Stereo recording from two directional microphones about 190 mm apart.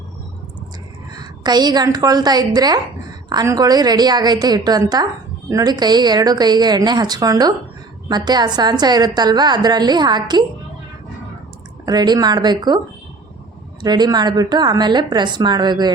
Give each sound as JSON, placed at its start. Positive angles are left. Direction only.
{"t": 1.1, "sound": "a woman's voice", "side_deg": -20}
{"t": 11.9, "sound": "a woman's voice", "side_deg": -20}
{"t": 13.8, "sound": "a woman's voice", "side_deg": -20}